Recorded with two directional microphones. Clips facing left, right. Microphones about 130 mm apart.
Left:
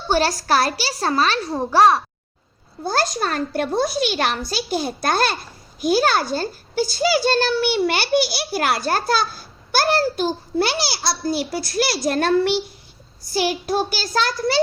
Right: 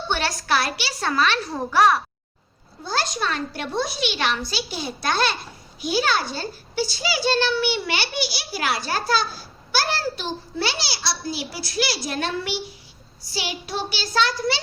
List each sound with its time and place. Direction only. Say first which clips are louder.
0.1 s a woman's voice: left 6 dB; 35° left (ahead or behind)
2.8 s a child's voice: left 4 dB; 50° left (ahead or behind)